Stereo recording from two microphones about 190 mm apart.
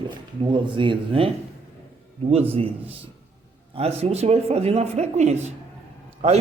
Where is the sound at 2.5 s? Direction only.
30° right (ahead or behind).